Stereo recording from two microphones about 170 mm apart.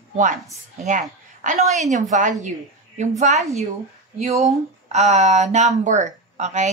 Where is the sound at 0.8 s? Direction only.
50° right (ahead or behind).